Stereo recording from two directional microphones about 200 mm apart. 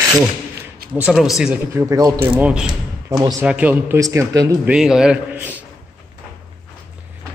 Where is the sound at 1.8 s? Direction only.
15° right (ahead or behind).